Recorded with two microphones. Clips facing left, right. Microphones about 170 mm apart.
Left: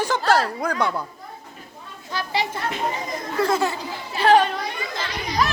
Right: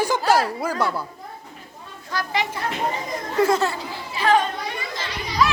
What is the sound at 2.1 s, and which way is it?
Speech, 30° left (ahead or behind).